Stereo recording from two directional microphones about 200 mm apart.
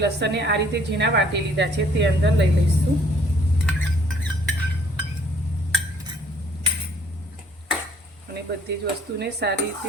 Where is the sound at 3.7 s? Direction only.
5° left (ahead or behind).